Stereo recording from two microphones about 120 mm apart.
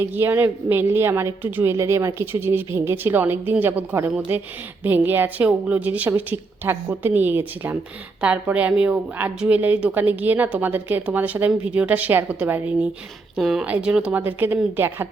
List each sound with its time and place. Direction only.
0.0 s a woman's voice: 20° right (ahead or behind)
13.3 s a woman's voice: 5° right (ahead or behind)